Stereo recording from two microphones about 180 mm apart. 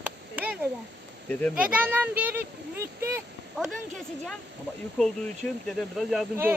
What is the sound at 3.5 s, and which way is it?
Speech, centre (ahead or behind).